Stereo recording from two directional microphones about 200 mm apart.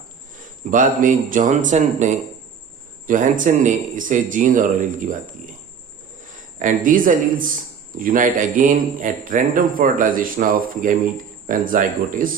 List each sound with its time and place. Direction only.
0.3 s speech: 40° right (ahead or behind)
6.6 s speech: 40° right (ahead or behind)